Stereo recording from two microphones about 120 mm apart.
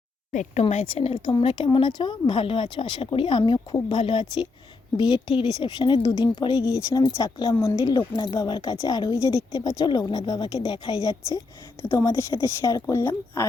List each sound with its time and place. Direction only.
0.7 s speech: 60° left (ahead or behind)
1.2 s speech: 45° left (ahead or behind)
11.0 s speech: 30° left (ahead or behind)